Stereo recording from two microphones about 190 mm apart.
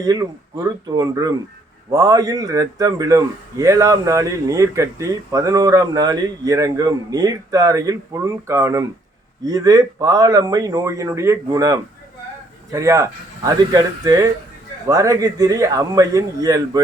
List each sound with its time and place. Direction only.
0.0 s speech: 20° right (ahead or behind)